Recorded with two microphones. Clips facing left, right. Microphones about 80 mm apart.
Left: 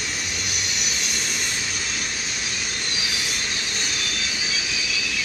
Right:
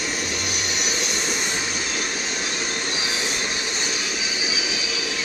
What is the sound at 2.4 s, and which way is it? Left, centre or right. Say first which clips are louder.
Train: right 3 dB; right.